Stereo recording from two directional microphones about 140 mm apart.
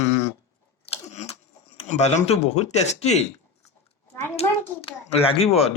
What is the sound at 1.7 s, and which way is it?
Speech, 50° left (ahead or behind).